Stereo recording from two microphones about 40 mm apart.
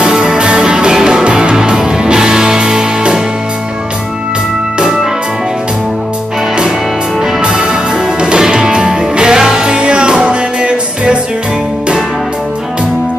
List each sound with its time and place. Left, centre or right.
0.0 s music: centre
8.2 s music: right